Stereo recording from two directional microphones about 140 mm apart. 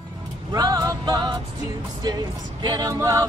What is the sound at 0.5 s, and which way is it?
Music, 30° right (ahead or behind).